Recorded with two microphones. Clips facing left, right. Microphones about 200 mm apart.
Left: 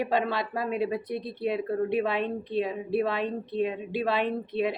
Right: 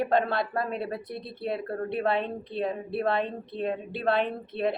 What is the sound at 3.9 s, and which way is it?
Speech, centre (ahead or behind).